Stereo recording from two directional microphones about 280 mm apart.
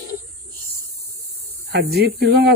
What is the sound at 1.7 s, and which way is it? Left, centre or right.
Speech, right.